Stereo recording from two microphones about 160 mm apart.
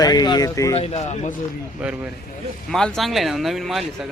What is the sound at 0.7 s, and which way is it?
Speech, 40° left (ahead or behind).